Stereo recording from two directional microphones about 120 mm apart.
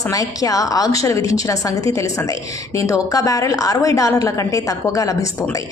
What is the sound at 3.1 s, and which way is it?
A woman's voice, 30° left (ahead or behind).